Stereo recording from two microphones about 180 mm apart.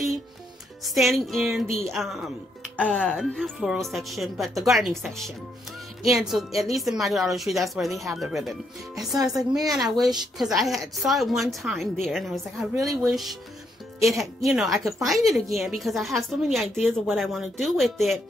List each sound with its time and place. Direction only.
0.8 s a woman's voice: centre (ahead or behind)